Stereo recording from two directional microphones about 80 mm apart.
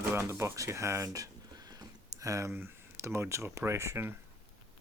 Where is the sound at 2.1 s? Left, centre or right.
Right.